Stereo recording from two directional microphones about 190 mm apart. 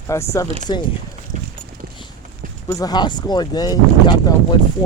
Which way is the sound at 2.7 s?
20° left (ahead or behind).